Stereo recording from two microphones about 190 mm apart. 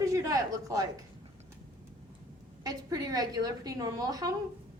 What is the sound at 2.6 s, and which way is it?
Speech, 20° right (ahead or behind).